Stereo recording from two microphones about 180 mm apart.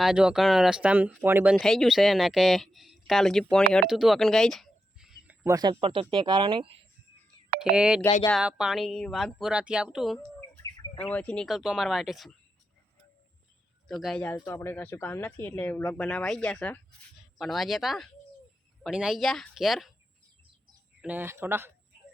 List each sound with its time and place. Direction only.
0.0 s speech: 5° right (ahead or behind)
3.7 s a sound: centre (ahead or behind)
5.5 s speech: 20° right (ahead or behind)
7.6 s speech: 5° right (ahead or behind)
13.8 s speech: centre (ahead or behind)
21.0 s speech: 10° right (ahead or behind)